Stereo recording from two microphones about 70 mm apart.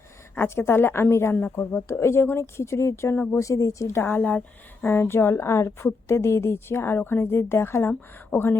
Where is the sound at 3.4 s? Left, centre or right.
Left.